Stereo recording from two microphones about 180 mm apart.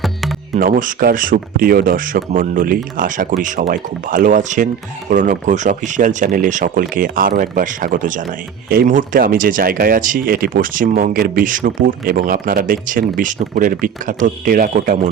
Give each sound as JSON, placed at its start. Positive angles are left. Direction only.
{"t": 0.0, "sound": "music", "side_deg": 0}
{"t": 0.5, "sound": "speech", "side_deg": -50}